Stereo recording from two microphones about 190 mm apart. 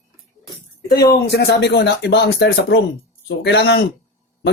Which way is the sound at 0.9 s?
15° left (ahead or behind).